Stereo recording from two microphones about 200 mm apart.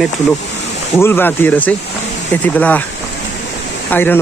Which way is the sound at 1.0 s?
10° left (ahead or behind).